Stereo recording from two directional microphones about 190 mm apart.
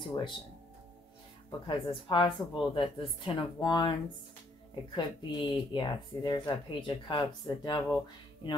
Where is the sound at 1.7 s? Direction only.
25° left (ahead or behind).